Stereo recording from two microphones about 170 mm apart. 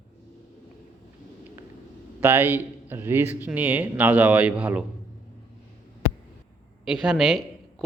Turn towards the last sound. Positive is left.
turn(degrees=0)  # may be behind; listen again after turning